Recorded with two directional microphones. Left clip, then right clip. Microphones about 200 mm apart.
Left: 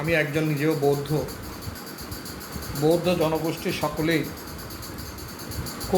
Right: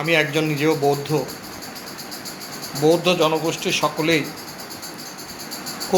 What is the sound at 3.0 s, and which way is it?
A man's voice, centre (ahead or behind).